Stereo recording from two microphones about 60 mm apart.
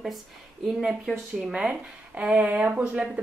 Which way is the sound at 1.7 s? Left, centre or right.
Right.